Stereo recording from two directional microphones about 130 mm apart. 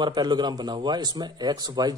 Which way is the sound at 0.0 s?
35° right (ahead or behind).